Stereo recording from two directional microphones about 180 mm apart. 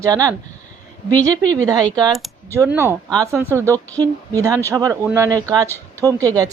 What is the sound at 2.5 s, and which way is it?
Speech, 15° right (ahead or behind).